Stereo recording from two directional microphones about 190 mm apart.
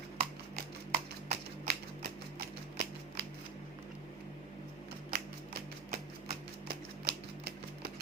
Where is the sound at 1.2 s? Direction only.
55° right (ahead or behind).